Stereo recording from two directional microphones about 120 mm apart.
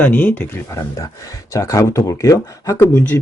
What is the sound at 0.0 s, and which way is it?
A man's voice, 15° left (ahead or behind).